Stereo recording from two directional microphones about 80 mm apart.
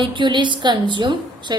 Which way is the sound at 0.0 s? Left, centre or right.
Right.